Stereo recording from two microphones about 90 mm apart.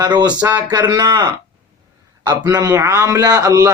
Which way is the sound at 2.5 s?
40° right (ahead or behind).